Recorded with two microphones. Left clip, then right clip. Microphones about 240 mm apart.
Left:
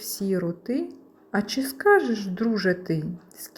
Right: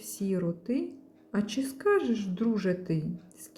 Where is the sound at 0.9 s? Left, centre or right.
Centre.